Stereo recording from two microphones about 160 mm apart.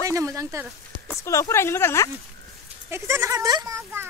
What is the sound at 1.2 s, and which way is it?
Speech, 20° left (ahead or behind).